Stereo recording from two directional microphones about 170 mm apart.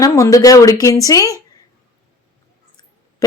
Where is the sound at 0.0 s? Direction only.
20° left (ahead or behind).